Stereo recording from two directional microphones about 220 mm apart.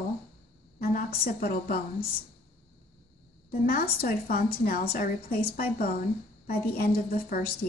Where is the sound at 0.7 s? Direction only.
40° left (ahead or behind).